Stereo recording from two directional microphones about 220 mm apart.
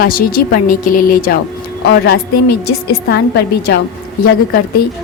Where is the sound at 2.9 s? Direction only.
45° left (ahead or behind).